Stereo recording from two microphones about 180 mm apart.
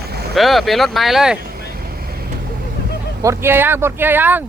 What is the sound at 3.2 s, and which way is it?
Speech, 15° right (ahead or behind).